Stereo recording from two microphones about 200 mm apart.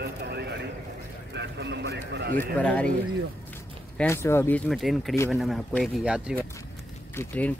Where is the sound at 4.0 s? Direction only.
10° left (ahead or behind); by 6.3 s 5° right (ahead or behind).